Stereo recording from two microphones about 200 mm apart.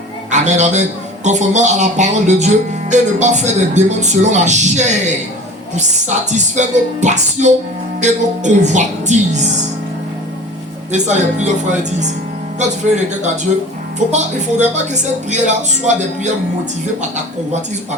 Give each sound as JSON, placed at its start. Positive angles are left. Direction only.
{"t": 0.3, "sound": "a man's voice", "side_deg": -35}
{"t": 6.3, "sound": "a man's voice", "side_deg": -35}
{"t": 10.9, "sound": "a man's voice", "side_deg": -35}